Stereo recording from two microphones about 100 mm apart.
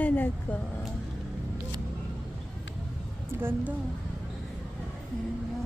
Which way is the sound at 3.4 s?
20° right (ahead or behind).